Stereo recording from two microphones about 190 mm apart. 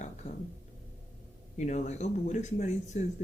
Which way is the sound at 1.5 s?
35° left (ahead or behind).